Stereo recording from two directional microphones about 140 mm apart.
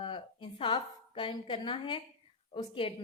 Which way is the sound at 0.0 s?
35° left (ahead or behind).